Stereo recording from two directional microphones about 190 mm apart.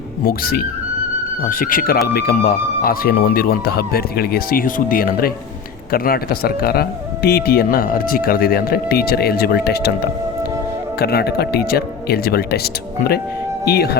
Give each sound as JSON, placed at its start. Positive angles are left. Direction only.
{"t": 0.3, "sound": "speech", "side_deg": 50}
{"t": 11.0, "sound": "speech", "side_deg": 55}